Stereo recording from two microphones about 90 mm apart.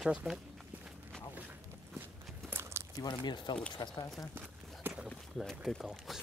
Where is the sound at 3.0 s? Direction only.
50° left (ahead or behind).